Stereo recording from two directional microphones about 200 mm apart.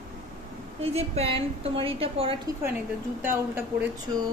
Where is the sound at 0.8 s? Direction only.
30° right (ahead or behind).